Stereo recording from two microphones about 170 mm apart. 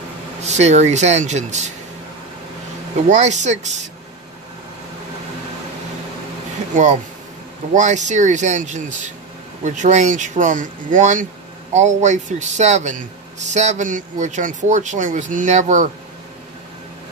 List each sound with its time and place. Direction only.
0.4 s speech: 40° right (ahead or behind)
3.1 s speech: 45° right (ahead or behind)
7.7 s speech: 45° right (ahead or behind)